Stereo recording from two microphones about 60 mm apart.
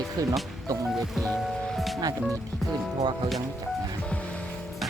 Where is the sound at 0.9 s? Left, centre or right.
Centre.